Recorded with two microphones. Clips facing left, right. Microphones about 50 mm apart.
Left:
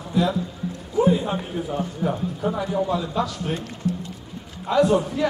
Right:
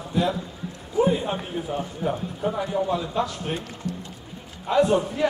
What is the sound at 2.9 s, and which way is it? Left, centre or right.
Speech, right.